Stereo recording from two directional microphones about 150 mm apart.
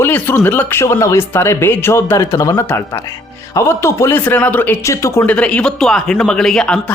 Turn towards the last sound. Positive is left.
turn(degrees=5)  # may be behind; listen again after turning